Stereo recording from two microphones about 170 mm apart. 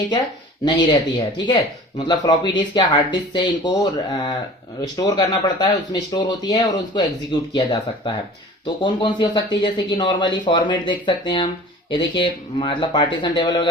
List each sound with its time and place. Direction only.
0.6 s speech: 25° left (ahead or behind)